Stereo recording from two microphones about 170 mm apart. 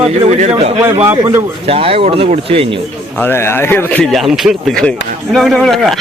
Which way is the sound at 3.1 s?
15° left (ahead or behind).